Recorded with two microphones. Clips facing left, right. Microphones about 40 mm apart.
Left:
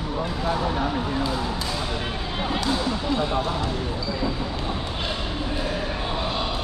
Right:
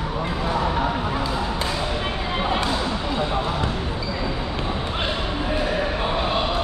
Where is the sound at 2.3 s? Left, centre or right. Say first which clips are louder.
Right 2 dB; right.